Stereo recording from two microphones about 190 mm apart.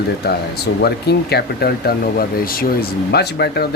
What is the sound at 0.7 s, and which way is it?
Speech, 65° left (ahead or behind).